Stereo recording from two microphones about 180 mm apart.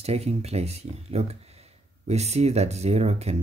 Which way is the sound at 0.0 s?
35° right (ahead or behind).